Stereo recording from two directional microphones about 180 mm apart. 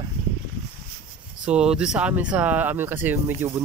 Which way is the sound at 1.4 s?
5° right (ahead or behind).